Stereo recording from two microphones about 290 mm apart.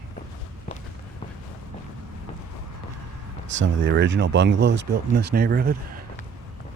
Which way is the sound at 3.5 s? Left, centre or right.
Right.